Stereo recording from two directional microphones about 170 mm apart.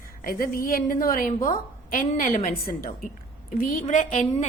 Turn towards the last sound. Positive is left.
turn(degrees=45)  # may be behind; listen again after turning